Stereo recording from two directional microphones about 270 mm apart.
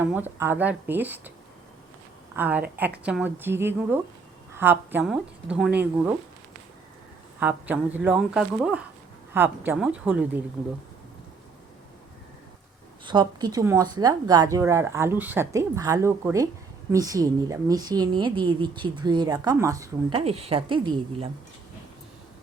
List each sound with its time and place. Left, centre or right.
0.0 s a woman's voice: centre
2.3 s a woman's voice: centre
7.3 s a woman's voice: centre
13.1 s a woman's voice: centre